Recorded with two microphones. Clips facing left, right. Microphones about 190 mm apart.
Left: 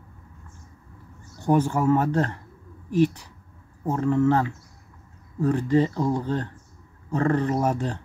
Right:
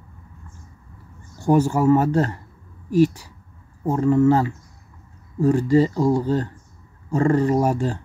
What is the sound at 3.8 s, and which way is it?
Speech, 10° right (ahead or behind).